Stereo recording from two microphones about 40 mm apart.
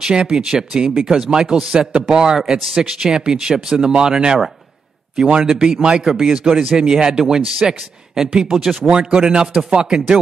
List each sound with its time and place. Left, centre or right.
0.0 s speech: centre
3.9 s speech: centre
6.0 s speech: centre
8.9 s speech: right